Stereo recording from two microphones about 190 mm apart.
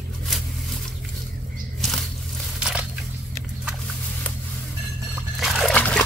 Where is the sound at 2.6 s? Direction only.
5° right (ahead or behind).